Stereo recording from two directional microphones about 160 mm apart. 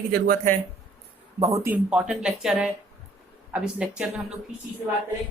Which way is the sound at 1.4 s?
20° right (ahead or behind).